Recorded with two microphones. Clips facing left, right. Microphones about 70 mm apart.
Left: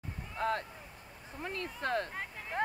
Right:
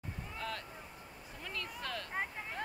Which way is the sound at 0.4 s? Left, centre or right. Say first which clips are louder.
Left 10 dB; left.